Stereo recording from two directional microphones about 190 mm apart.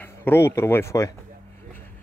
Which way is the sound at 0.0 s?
10° left (ahead or behind).